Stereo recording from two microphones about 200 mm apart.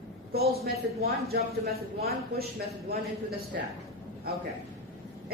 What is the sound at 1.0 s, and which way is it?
A woman's voice, 50° right (ahead or behind).